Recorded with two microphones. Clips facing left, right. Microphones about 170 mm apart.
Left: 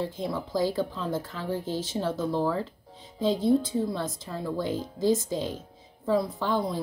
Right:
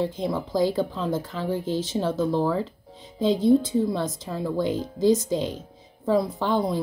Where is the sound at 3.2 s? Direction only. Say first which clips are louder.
Right 4 dB; 20° right (ahead or behind).